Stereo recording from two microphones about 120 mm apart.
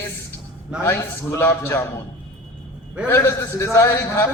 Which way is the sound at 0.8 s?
20° left (ahead or behind).